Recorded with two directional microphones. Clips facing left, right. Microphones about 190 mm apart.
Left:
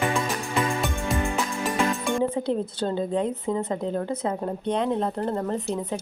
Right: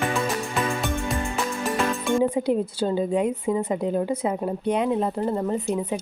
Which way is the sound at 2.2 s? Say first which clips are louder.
Right 4 dB; 15° right (ahead or behind).